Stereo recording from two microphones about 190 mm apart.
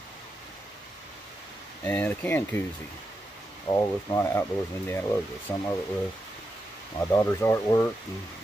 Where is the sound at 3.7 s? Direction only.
15° left (ahead or behind).